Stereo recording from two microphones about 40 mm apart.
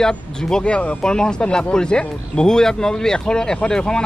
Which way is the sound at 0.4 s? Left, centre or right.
Centre.